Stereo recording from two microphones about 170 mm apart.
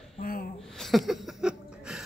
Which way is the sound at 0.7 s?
Centre (ahead or behind).